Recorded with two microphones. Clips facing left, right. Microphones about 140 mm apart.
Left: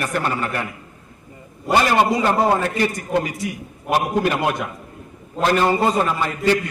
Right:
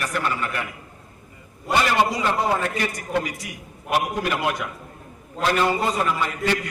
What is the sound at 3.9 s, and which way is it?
Speech, 35° left (ahead or behind).